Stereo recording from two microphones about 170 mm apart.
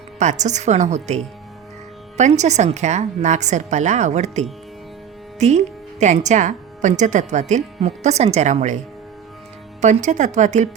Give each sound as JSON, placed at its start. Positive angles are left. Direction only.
{"t": 0.2, "sound": "speech", "side_deg": -45}
{"t": 9.8, "sound": "speech", "side_deg": -45}